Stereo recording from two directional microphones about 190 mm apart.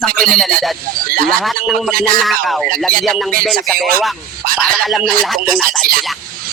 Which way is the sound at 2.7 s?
50° right (ahead or behind).